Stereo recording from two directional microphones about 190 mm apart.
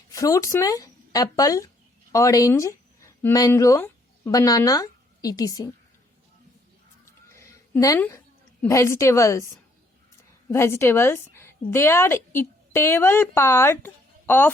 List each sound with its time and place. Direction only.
0.1 s speech: 15° left (ahead or behind)
7.0 s a sound: 15° left (ahead or behind)
8.6 s a woman's voice: 15° left (ahead or behind)
10.5 s a woman's voice: 15° left (ahead or behind)